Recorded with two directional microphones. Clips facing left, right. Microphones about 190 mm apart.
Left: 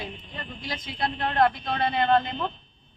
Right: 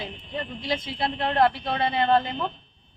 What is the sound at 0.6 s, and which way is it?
Speech, 25° right (ahead or behind).